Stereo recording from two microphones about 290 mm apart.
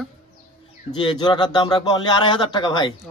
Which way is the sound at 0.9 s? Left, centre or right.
Centre.